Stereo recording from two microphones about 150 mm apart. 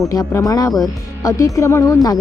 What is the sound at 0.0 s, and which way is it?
Speech, 20° left (ahead or behind).